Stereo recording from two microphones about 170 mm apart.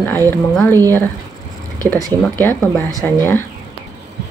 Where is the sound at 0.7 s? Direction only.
20° right (ahead or behind).